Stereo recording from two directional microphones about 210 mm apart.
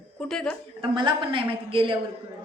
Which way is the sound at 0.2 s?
5° left (ahead or behind).